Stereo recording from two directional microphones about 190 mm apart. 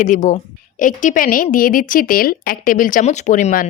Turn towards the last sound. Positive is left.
turn(degrees=45)  # may be behind; listen again after turning